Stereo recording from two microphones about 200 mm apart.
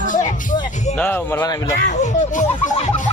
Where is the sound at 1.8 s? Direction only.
40° left (ahead or behind).